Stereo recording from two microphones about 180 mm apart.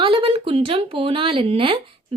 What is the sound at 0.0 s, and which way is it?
Speech, 30° right (ahead or behind).